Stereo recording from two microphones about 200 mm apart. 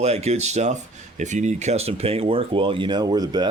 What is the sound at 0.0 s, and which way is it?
Speech, 35° right (ahead or behind).